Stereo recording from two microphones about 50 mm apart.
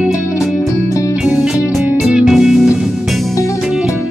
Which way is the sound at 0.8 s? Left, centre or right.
Left.